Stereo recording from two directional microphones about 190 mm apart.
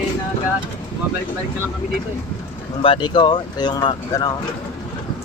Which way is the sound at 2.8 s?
25° left (ahead or behind).